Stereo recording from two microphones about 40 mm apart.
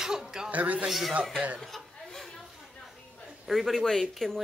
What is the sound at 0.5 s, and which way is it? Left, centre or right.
Speech, right.